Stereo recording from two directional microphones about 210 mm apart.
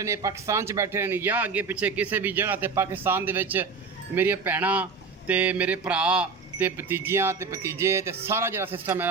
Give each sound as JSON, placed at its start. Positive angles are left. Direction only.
{"t": 0.0, "sound": "speech", "side_deg": -15}